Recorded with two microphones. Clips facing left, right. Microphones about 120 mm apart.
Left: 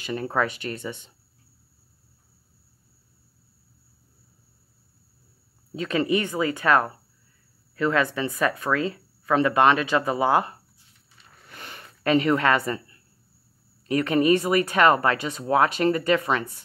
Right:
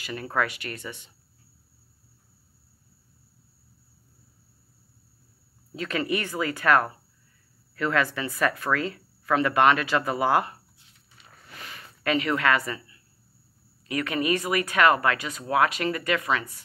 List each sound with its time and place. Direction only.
0.0 s speech: 25° left (ahead or behind)
5.8 s speech: 25° left (ahead or behind)
12.0 s speech: 35° left (ahead or behind)
12.7 s a sound: 45° left (ahead or behind)
13.8 s speech: 35° left (ahead or behind)
16.2 s speech: centre (ahead or behind)